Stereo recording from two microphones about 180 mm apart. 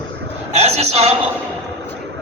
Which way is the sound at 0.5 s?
35° right (ahead or behind).